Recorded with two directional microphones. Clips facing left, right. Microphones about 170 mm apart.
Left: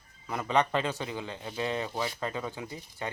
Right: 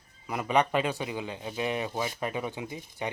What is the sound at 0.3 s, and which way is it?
Speech, 15° right (ahead or behind).